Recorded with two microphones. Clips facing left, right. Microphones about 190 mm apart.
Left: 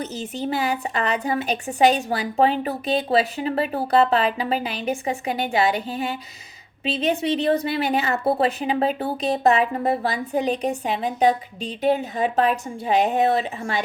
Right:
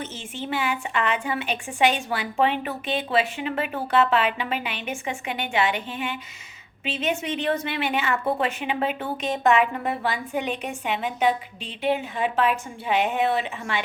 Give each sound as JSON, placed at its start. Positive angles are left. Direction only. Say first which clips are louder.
{"t": 0.0, "sound": "a woman's voice", "louder": "left 6 dB", "side_deg": 40}